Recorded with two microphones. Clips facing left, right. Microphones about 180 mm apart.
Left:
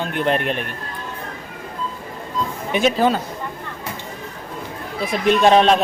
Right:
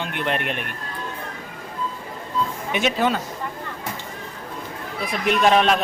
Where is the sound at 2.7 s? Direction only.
35° left (ahead or behind).